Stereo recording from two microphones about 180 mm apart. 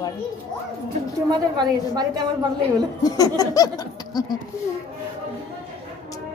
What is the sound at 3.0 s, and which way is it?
A woman's voice, 20° left (ahead or behind).